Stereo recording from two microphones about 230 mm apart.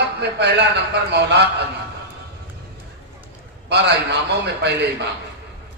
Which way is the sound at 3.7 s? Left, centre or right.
Right.